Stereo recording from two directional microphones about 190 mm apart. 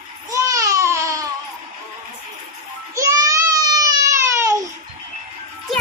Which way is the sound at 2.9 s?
15° right (ahead or behind).